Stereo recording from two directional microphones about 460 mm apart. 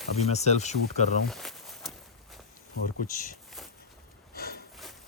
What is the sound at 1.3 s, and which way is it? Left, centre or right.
Walk, centre.